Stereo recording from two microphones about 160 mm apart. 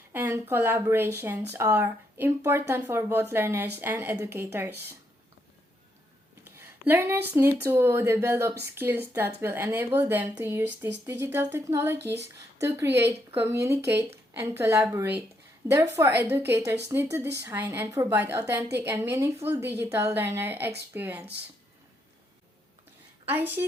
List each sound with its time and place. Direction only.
0.1 s speech: 15° right (ahead or behind)
6.4 s speech: 15° right (ahead or behind)
23.6 s speech: 15° right (ahead or behind)